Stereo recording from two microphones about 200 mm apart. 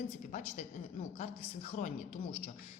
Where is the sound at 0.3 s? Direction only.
35° left (ahead or behind).